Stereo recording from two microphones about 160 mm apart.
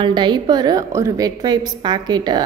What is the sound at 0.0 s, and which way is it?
A woman's voice, 30° right (ahead or behind).